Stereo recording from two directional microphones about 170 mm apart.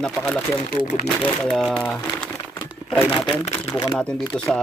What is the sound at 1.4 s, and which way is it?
Speech, centre (ahead or behind).